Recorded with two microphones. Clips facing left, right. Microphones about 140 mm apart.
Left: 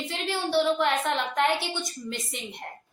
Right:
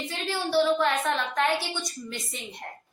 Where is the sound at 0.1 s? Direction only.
20° left (ahead or behind).